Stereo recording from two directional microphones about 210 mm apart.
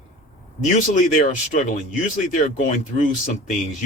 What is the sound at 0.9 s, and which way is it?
Speech, 35° left (ahead or behind).